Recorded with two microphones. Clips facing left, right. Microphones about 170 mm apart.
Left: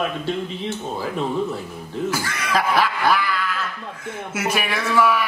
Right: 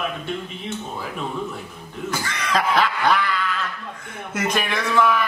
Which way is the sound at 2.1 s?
5° left (ahead or behind).